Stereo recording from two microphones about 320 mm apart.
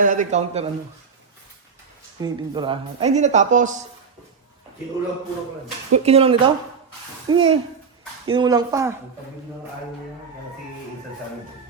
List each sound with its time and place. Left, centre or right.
0.0 s speech: right
2.2 s speech: centre
5.9 s speech: centre